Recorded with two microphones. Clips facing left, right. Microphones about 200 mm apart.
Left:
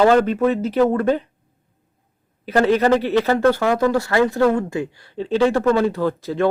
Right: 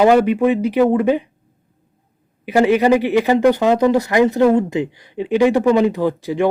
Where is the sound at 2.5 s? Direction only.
10° right (ahead or behind).